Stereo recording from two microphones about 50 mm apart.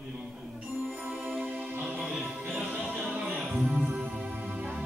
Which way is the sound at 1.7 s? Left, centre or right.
Right.